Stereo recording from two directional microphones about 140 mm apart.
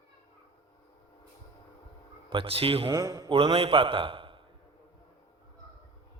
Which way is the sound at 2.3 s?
40° right (ahead or behind).